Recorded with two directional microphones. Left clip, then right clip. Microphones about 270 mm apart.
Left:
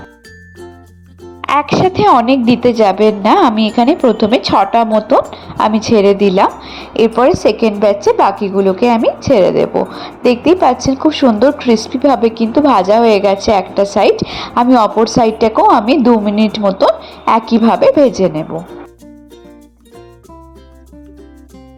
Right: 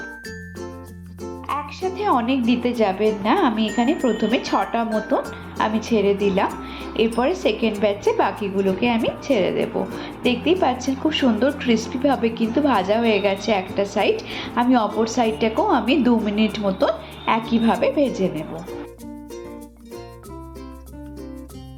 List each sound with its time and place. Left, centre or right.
1.4 s a woman's voice: left